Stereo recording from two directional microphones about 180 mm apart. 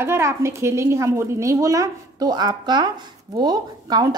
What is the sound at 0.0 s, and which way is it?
A woman's voice, 15° right (ahead or behind).